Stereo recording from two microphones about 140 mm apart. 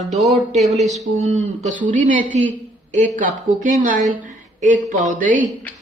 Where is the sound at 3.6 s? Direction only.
75° right (ahead or behind).